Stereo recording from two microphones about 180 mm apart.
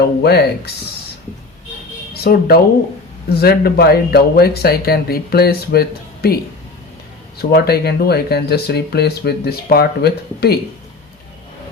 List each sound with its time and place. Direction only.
0.2 s speech: 65° left (ahead or behind)
2.1 s speech: 60° left (ahead or behind)